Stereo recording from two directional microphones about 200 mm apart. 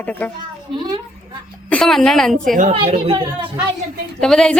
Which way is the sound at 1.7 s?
Centre (ahead or behind).